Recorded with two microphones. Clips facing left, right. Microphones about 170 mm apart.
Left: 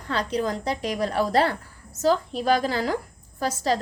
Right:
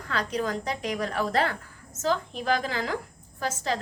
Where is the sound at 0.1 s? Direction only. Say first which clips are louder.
Left 3 dB; 30° left (ahead or behind).